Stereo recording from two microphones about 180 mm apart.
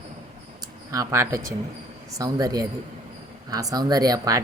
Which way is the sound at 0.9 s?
15° right (ahead or behind).